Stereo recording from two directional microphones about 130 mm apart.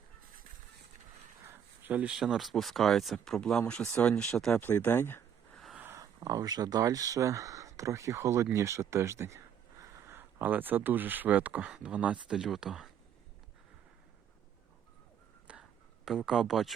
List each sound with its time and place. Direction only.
1.5 s speech: 15° right (ahead or behind); by 4.5 s 5° left (ahead or behind)
4.5 s speech: 15° left (ahead or behind)
5.7 s a sound: 15° right (ahead or behind)
6.1 s speech: 30° right (ahead or behind); by 12.9 s 5° right (ahead or behind)
15.5 s whispering: 10° right (ahead or behind)
16.0 s speech: 5° right (ahead or behind)